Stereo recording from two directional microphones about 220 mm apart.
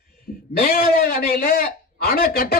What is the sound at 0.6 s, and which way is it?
A man's voice, 45° left (ahead or behind).